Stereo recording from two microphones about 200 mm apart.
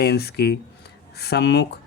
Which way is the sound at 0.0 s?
55° left (ahead or behind).